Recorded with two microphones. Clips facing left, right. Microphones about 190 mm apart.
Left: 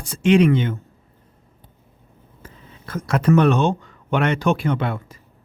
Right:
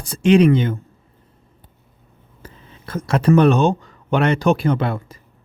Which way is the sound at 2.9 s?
30° right (ahead or behind).